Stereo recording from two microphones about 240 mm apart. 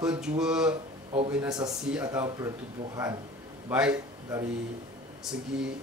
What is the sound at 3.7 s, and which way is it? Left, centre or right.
A man's voice, centre.